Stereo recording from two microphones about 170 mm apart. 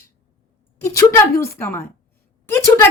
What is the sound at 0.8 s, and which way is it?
Speech, 20° left (ahead or behind).